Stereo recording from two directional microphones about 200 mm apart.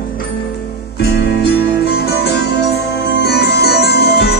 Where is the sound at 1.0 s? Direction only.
55° left (ahead or behind).